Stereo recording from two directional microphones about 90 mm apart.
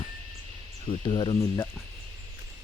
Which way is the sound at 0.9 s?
85° left.